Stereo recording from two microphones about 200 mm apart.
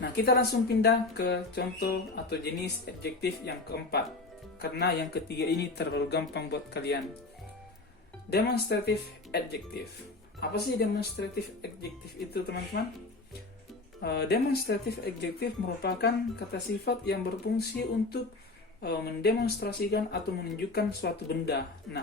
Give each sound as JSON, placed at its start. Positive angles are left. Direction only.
{"t": 0.0, "sound": "speech", "side_deg": 55}
{"t": 8.3, "sound": "speech", "side_deg": 55}
{"t": 12.7, "sound": "speech", "side_deg": 60}
{"t": 14.0, "sound": "speech", "side_deg": 55}